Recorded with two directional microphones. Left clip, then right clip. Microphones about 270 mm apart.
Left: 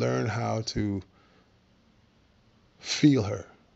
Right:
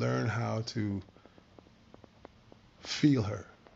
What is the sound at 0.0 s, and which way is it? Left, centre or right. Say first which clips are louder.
Speech: left 5 dB; left.